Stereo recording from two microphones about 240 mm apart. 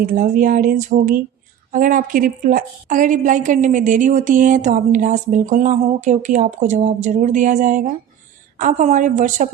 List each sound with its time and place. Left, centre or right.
0.0 s a woman's voice: right